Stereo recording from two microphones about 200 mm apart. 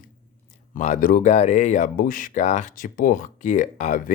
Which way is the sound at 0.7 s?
40° left (ahead or behind).